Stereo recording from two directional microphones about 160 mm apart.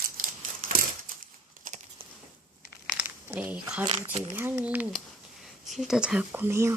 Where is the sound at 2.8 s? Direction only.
10° right (ahead or behind).